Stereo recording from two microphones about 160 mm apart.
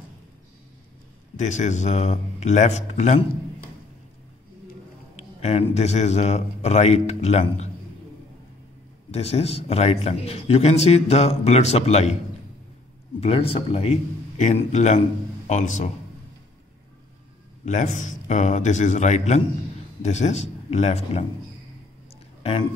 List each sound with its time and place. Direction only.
1.3 s a man's voice: 50° left (ahead or behind)
5.1 s a man's voice: 40° left (ahead or behind)
9.1 s a man's voice: 40° left (ahead or behind)
13.2 s a man's voice: 35° left (ahead or behind)
17.6 s a man's voice: 50° left (ahead or behind)
22.4 s speech: 35° left (ahead or behind)